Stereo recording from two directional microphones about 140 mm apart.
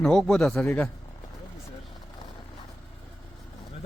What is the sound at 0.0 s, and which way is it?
Speech, 5° left (ahead or behind).